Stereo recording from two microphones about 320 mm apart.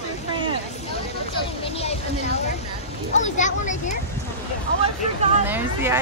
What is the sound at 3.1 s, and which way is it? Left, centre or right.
Speech, left.